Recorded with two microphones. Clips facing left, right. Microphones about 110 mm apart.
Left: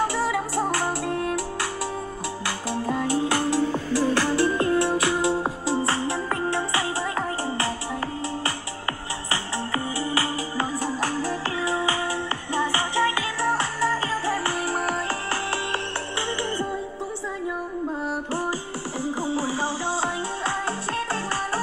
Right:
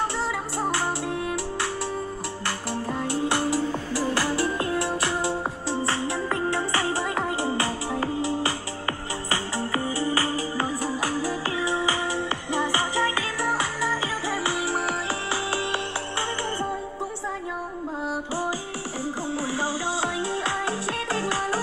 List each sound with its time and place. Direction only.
0.1 s music: 5° left (ahead or behind)
7.0 s music: 15° right (ahead or behind)
11.0 s music: 5° right (ahead or behind)
18.9 s music: centre (ahead or behind)